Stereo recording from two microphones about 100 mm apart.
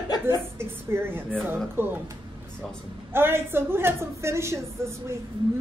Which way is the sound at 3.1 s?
25° right (ahead or behind).